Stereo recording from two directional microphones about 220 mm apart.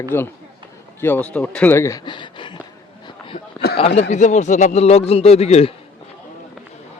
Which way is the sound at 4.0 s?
30° left (ahead or behind).